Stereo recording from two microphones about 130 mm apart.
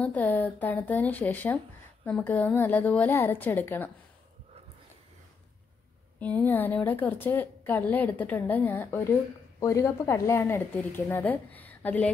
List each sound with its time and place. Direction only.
0.0 s a woman's voice: 10° left (ahead or behind)
6.1 s a woman's voice: 10° left (ahead or behind)